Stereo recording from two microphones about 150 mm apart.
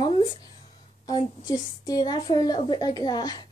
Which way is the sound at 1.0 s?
25° left (ahead or behind).